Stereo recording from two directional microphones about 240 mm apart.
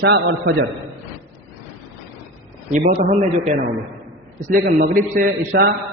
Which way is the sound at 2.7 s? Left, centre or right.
Right.